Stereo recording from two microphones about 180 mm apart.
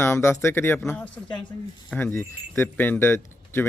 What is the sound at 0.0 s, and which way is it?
Speech, 15° left (ahead or behind).